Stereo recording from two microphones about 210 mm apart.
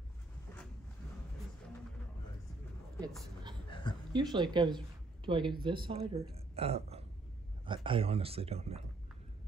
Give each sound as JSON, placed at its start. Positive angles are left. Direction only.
{"t": 4.1, "sound": "speech", "side_deg": -20}
{"t": 6.3, "sound": "a sound", "side_deg": -30}
{"t": 7.6, "sound": "speech", "side_deg": -25}